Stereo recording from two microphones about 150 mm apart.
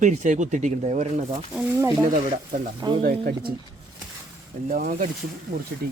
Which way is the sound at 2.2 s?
55° right (ahead or behind).